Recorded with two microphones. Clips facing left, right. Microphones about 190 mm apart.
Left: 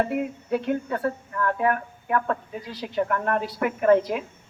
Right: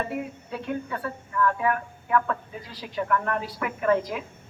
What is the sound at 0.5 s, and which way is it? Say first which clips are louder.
A woman's voice: left 6 dB; 55° left (ahead or behind).